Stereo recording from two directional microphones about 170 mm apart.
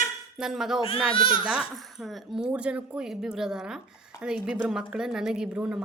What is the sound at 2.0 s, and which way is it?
A woman's voice, 5° right (ahead or behind).